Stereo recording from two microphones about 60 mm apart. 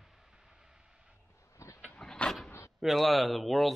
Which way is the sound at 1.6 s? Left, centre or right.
Left.